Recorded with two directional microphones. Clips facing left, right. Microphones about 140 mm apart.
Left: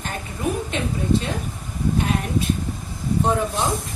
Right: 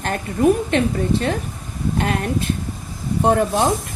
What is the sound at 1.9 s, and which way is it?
A woman's voice, 65° right (ahead or behind).